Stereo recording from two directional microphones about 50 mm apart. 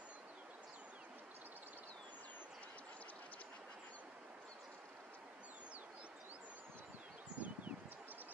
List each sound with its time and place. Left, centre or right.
7.3 s rustling leaves: right